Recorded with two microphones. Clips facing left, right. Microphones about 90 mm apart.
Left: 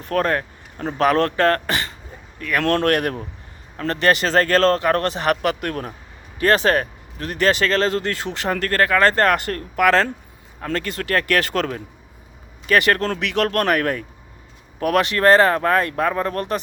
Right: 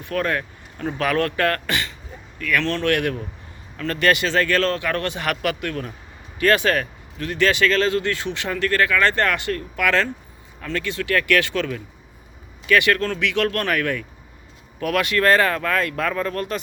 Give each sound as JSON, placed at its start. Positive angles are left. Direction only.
{"t": 0.0, "sound": "speech", "side_deg": 40}
{"t": 2.6, "sound": "speech", "side_deg": 45}